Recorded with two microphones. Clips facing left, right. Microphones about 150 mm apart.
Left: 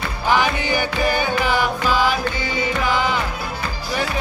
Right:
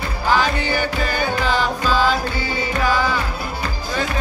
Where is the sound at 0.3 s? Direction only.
15° left (ahead or behind).